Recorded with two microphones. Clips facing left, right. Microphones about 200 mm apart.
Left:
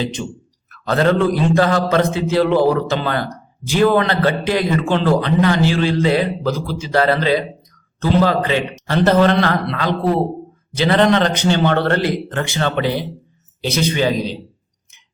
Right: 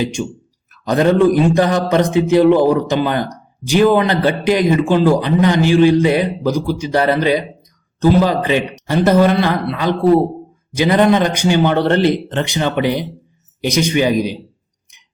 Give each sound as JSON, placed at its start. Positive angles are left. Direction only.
{"t": 0.0, "sound": "a man's voice", "side_deg": -10}